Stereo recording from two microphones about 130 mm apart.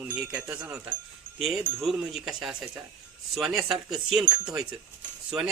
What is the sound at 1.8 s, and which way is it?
Speech, centre (ahead or behind).